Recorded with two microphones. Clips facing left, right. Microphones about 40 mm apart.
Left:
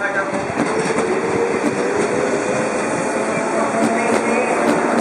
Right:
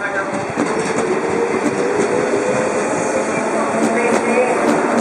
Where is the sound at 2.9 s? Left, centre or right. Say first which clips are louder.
Right 2 dB; centre.